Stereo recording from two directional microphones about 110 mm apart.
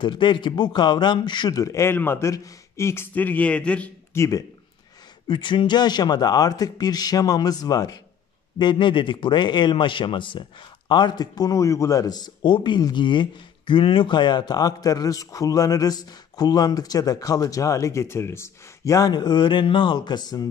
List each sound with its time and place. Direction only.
0.0 s a man's voice: 45° left (ahead or behind); by 3.9 s 10° left (ahead or behind)
4.1 s speech: 25° left (ahead or behind)
5.3 s a man's voice: 45° left (ahead or behind)